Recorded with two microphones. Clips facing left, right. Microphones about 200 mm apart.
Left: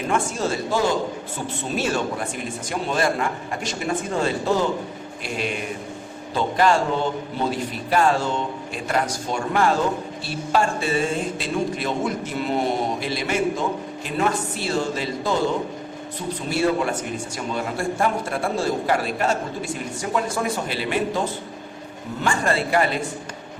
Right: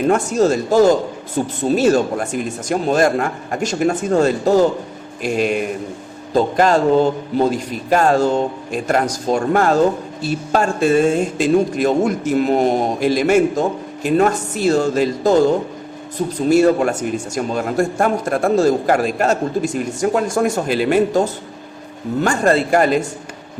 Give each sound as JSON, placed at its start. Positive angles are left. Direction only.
{"t": 0.1, "sound": "speech", "side_deg": -40}
{"t": 16.5, "sound": "speech", "side_deg": -45}